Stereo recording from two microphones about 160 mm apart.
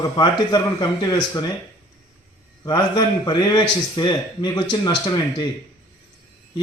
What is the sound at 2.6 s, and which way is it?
A man's voice, 25° left (ahead or behind).